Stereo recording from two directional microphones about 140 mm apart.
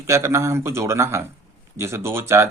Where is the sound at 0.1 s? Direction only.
20° right (ahead or behind).